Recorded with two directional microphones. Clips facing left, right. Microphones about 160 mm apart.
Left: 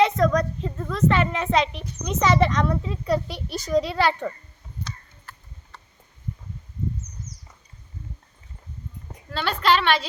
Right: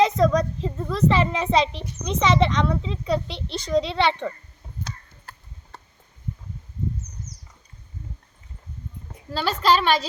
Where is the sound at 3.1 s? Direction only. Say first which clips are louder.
Even; 25° right (ahead or behind).